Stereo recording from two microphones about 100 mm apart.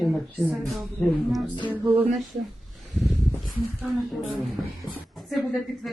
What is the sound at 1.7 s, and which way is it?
Music, 20° right (ahead or behind).